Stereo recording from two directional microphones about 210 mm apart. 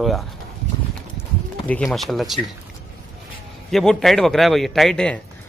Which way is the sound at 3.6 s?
Centre (ahead or behind).